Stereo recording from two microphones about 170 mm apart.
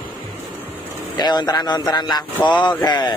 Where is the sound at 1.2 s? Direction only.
25° left (ahead or behind).